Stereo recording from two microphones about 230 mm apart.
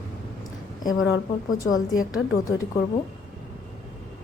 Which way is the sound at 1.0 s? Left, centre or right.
Left.